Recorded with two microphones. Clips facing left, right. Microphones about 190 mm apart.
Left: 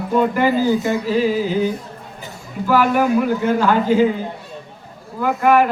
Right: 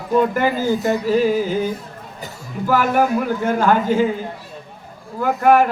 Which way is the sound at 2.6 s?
45° right (ahead or behind).